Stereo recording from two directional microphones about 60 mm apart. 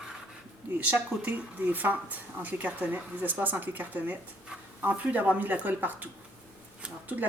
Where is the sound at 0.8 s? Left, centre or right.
Right.